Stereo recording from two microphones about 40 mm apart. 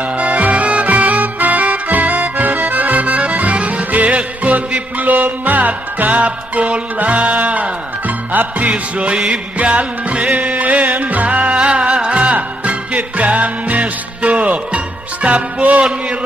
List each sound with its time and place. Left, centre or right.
0.0 s music: right